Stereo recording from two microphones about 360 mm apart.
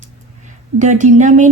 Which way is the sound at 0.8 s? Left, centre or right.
Centre.